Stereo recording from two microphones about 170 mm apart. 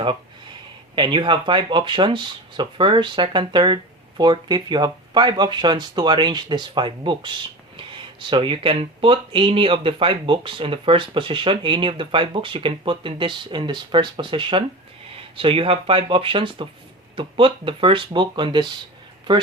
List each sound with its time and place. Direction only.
0.9 s speech: 30° right (ahead or behind)